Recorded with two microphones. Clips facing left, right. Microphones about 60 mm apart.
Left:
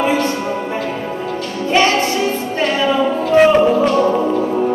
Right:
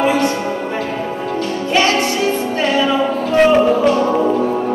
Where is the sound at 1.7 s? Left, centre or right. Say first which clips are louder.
Left 2 dB; left.